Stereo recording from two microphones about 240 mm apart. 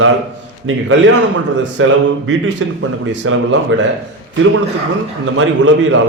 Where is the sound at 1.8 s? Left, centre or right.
Right.